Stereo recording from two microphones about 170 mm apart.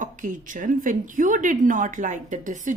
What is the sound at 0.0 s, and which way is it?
A woman's voice, 50° right (ahead or behind).